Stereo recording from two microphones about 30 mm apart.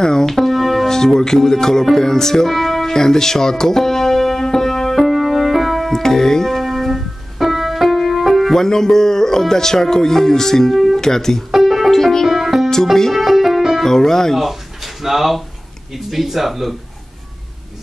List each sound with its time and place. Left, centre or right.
0.0 s speech: left
0.3 s music: centre
0.8 s speech: centre
2.5 s music: centre
2.9 s music: centre
4.9 s keyboard: centre
5.9 s speech: centre
6.6 s keyboard: centre
8.5 s speech: centre
11.5 s music: centre
11.9 s music: centre
12.3 s music: centre
13.8 s speech: centre
14.3 s speech: centre